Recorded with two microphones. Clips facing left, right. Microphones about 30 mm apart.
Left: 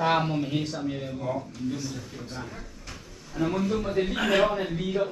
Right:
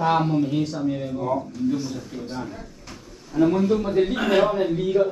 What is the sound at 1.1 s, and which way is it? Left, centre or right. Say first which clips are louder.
Speech: right 6 dB; centre.